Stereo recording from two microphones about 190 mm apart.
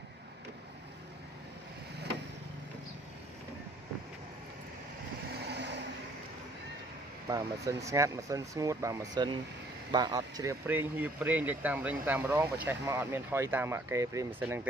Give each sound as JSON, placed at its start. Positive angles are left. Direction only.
{"t": 5.3, "sound": "vehicle", "side_deg": -60}
{"t": 7.2, "sound": "speech", "side_deg": -20}